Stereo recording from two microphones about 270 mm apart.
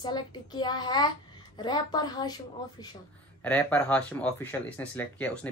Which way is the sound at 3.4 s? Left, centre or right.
Centre.